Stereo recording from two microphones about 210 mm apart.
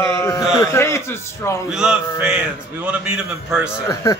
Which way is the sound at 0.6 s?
15° left (ahead or behind).